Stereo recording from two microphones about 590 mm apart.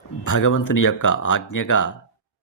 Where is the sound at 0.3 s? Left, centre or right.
Left.